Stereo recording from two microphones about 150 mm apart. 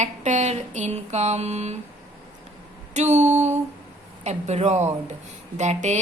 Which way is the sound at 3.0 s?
50° right (ahead or behind).